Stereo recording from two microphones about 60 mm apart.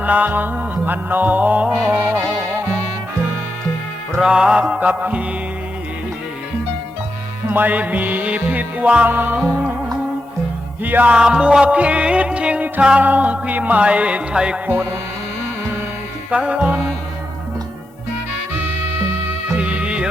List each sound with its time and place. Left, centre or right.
0.0 s music: right
4.2 s music: centre
4.8 s music: right
7.5 s music: right
10.8 s music: right
11.1 s music: centre
14.7 s music: right
16.3 s music: centre
19.5 s music: right